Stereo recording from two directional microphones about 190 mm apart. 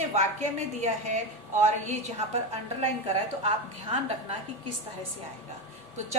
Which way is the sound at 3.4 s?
30° right (ahead or behind).